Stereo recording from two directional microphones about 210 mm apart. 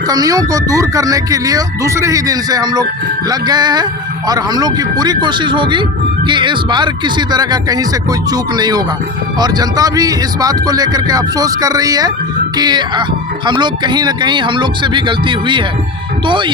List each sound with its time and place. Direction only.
0.1 s speech: 15° right (ahead or behind)